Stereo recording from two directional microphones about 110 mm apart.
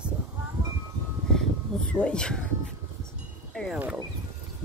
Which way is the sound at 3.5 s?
5° left (ahead or behind).